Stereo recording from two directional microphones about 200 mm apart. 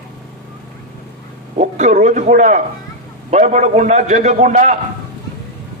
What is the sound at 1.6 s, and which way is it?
A man's voice, 35° right (ahead or behind).